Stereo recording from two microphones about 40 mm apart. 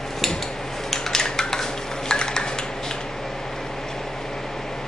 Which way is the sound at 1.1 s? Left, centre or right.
Centre.